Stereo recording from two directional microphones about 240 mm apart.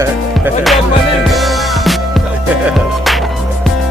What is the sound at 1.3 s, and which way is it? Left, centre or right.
Music, centre.